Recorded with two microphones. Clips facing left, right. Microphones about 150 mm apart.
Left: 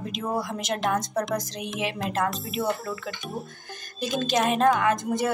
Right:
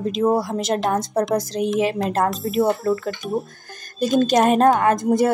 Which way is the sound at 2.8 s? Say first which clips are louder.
Right 13 dB; 45° right (ahead or behind).